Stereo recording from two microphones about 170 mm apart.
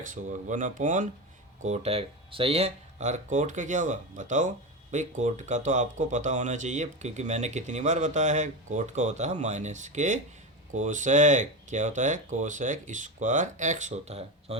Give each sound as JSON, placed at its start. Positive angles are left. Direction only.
{"t": 0.1, "sound": "speech", "side_deg": -45}